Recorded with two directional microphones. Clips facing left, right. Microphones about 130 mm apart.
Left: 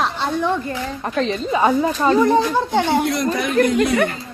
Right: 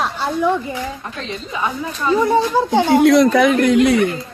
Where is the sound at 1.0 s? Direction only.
35° left (ahead or behind).